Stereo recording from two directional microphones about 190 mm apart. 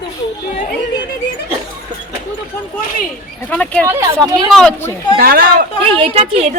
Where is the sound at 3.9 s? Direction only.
15° right (ahead or behind).